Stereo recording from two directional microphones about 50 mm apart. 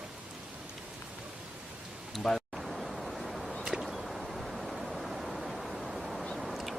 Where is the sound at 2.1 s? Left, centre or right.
Centre.